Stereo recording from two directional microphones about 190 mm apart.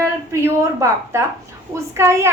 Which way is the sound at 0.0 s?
15° right (ahead or behind).